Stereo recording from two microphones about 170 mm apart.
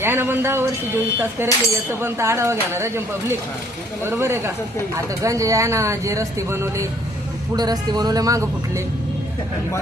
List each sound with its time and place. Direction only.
0.0 s speech: 15° right (ahead or behind)